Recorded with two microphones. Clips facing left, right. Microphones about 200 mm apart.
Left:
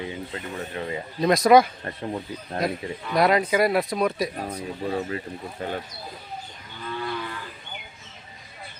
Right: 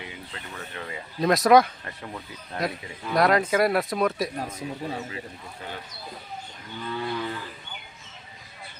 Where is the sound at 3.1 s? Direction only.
Centre (ahead or behind).